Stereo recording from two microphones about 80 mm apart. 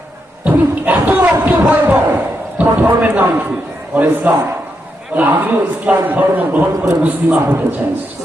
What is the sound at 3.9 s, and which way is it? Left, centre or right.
A man's voice, right.